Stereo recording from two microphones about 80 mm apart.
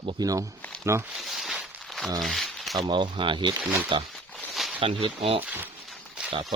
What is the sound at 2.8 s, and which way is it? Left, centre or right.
Speech, right.